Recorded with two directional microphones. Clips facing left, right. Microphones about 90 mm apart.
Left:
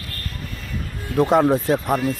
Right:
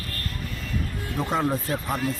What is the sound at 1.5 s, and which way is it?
Speech, 85° left.